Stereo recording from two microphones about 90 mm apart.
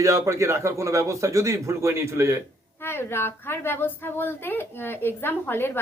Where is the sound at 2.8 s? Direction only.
25° left (ahead or behind).